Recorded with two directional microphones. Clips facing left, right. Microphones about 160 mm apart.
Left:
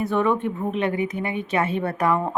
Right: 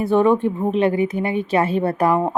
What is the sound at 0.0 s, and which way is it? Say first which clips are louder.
Speech: right 6 dB; 30° right (ahead or behind).